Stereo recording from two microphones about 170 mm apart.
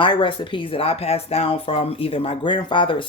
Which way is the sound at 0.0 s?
30° left (ahead or behind).